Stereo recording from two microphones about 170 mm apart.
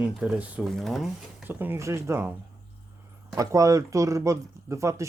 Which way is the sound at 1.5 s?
10° right (ahead or behind).